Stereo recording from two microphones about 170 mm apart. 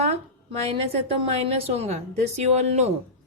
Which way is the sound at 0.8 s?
35° right (ahead or behind).